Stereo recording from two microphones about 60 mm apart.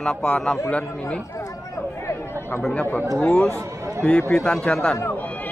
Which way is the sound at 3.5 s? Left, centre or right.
Right.